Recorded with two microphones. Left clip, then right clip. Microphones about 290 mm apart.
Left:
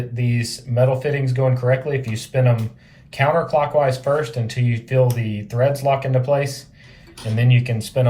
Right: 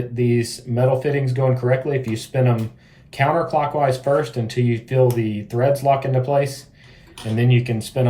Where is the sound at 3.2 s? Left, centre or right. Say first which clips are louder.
Left 1 dB; centre.